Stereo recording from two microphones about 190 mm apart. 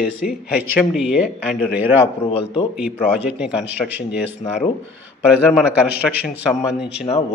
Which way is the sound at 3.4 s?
5° right (ahead or behind).